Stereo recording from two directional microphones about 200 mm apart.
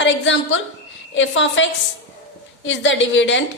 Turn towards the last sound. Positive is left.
turn(degrees=65)  # may be behind; listen again after turning